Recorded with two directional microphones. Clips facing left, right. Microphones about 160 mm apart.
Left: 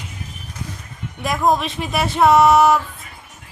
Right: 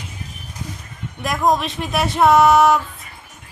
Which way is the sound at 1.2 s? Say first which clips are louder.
Even; centre (ahead or behind).